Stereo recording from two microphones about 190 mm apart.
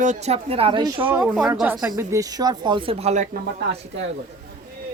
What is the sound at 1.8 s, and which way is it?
Speech, 15° right (ahead or behind).